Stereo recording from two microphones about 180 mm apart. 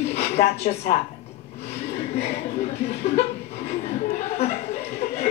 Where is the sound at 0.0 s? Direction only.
35° left (ahead or behind).